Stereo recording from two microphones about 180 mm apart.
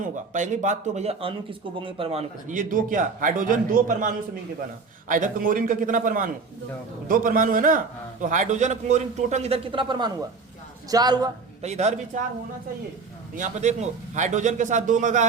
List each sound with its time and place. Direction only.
0.0 s speech: 45° right (ahead or behind)
2.6 s a man's voice: 50° right (ahead or behind); by 11.3 s 20° right (ahead or behind)
11.6 s speech: 40° right (ahead or behind)
13.3 s speech: 45° right (ahead or behind)